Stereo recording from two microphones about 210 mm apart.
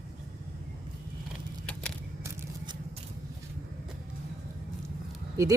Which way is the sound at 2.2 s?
10° right (ahead or behind).